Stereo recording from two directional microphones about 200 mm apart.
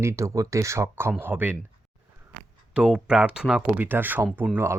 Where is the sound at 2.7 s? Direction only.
5° right (ahead or behind).